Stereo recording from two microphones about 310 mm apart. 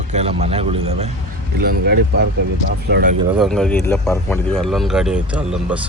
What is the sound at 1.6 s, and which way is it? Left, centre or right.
Speech, right.